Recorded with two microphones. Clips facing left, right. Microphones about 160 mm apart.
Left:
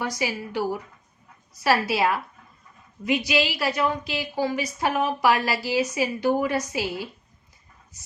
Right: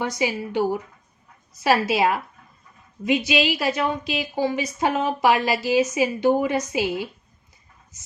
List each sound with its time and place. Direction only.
0.0 s a woman's voice: 20° right (ahead or behind)